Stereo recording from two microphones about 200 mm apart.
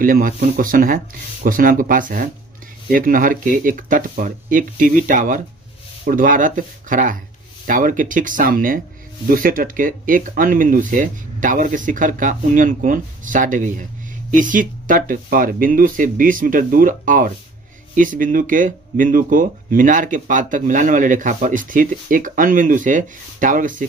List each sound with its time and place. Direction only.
0.0 s speech: 45° right (ahead or behind)